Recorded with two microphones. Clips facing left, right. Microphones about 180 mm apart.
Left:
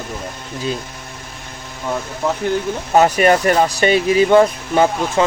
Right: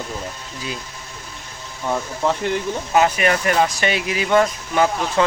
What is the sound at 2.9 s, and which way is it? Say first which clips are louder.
Speech: left 5 dB; 40° left (ahead or behind).